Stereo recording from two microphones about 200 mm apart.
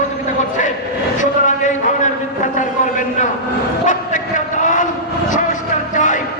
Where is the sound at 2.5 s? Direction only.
40° left (ahead or behind).